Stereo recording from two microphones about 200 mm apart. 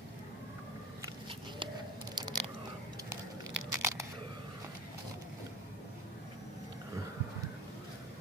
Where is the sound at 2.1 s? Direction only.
20° right (ahead or behind).